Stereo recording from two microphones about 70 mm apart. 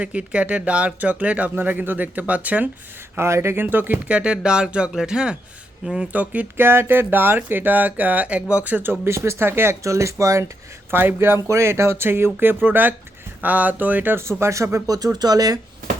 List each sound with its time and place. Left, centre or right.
0.0 s speech: centre
3.2 s speech: right
4.2 s speech: centre
6.1 s speech: right
6.6 s speech: right
10.9 s speech: right
14.9 s speech: right